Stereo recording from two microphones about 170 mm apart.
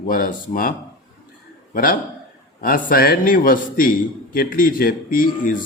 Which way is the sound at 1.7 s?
55° left (ahead or behind).